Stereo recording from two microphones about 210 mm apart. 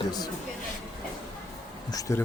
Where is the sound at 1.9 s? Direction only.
15° left (ahead or behind).